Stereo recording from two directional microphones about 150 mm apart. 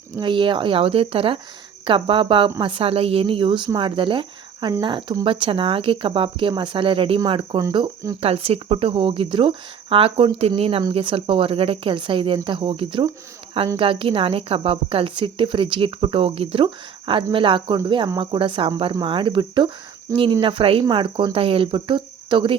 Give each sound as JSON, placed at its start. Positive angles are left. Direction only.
{"t": 0.2, "sound": "speech", "side_deg": -35}